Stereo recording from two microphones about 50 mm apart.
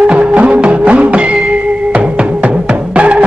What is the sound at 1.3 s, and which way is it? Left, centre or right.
Music, centre.